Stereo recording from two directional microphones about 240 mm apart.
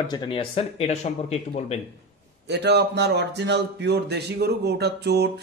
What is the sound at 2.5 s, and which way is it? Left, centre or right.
A man's voice, right.